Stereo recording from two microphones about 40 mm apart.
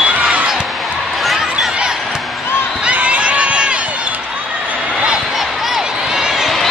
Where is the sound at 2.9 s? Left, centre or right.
Right.